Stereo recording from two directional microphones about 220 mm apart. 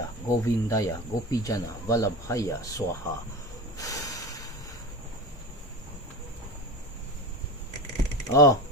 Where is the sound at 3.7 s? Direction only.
15° left (ahead or behind).